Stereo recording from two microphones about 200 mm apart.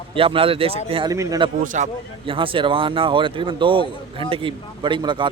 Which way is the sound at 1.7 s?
35° right (ahead or behind).